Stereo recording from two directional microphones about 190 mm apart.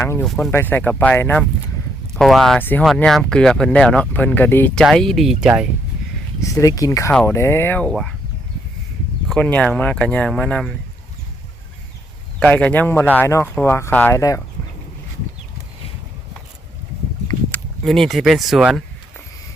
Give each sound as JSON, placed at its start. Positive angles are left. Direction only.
{"t": 0.0, "sound": "speech", "side_deg": 15}
{"t": 6.4, "sound": "speech", "side_deg": 15}
{"t": 7.1, "sound": "speech", "side_deg": 5}
{"t": 7.3, "sound": "speech", "side_deg": 15}
{"t": 9.3, "sound": "speech", "side_deg": 5}
{"t": 12.4, "sound": "speech", "side_deg": 5}
{"t": 17.5, "sound": "speech", "side_deg": 0}